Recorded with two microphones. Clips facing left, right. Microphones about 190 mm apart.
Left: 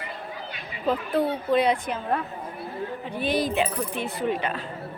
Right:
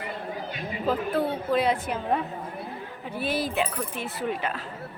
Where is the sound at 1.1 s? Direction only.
5° right (ahead or behind).